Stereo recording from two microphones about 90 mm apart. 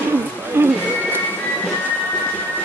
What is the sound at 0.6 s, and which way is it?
Speech, 20° right (ahead or behind).